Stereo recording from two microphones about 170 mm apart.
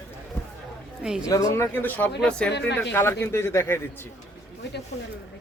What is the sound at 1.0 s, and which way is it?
Speech, 5° right (ahead or behind).